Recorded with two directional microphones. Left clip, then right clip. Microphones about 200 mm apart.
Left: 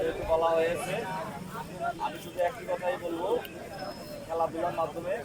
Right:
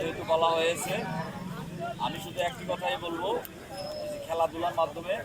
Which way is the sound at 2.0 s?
Centre (ahead or behind).